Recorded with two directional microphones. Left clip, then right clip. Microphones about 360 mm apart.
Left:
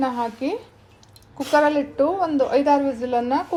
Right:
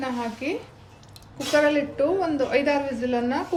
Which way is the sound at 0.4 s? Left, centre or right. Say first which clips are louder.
Left 3 dB; centre.